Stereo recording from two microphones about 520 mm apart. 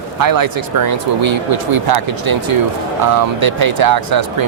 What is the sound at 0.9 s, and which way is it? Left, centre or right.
Speech, right.